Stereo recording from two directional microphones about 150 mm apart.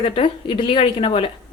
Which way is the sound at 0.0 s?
35° left (ahead or behind).